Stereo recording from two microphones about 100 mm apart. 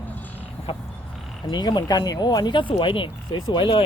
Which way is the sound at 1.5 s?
45° left (ahead or behind).